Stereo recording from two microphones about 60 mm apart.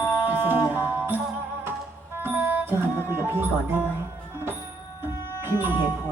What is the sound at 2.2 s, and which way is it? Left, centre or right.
Music, right.